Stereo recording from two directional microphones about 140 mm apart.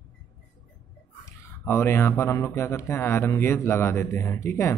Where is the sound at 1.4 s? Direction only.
15° left (ahead or behind).